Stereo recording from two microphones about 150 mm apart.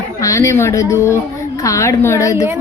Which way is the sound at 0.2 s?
20° left (ahead or behind).